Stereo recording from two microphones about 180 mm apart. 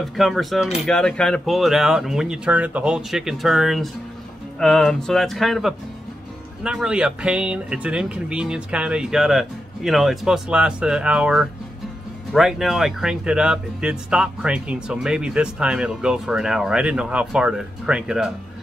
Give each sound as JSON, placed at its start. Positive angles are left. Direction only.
{"t": 0.0, "sound": "speech", "side_deg": 0}